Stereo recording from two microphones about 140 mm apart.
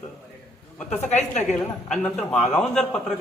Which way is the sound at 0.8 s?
55° left (ahead or behind).